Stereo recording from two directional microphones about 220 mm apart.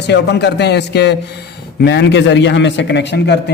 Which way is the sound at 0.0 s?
50° left (ahead or behind).